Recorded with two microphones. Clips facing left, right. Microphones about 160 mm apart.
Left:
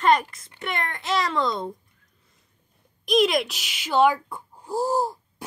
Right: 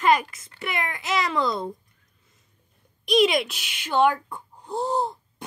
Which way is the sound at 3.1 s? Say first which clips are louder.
Even; centre (ahead or behind).